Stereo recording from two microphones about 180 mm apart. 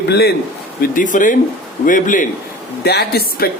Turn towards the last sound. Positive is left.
turn(degrees=65)  # may be behind; listen again after turning